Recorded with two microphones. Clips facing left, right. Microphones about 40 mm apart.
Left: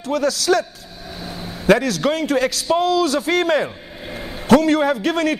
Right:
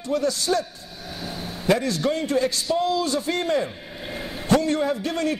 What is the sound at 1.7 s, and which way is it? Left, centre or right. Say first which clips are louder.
A man's voice: left 5 dB; left.